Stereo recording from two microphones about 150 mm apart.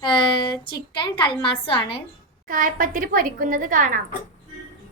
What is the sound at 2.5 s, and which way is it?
A woman's voice, 65° right (ahead or behind).